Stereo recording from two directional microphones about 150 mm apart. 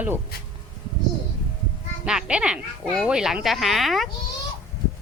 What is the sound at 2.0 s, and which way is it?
Speech, 5° right (ahead or behind).